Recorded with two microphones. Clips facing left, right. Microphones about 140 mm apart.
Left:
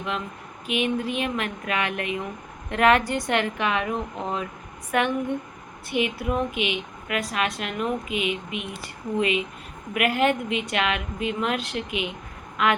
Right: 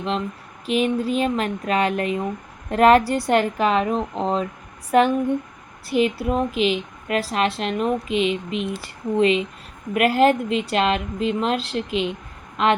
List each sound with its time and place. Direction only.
0.7 s a woman's voice: 35° right (ahead or behind)